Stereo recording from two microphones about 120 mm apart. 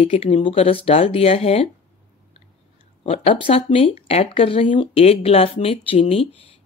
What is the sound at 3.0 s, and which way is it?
Speech, 50° left (ahead or behind).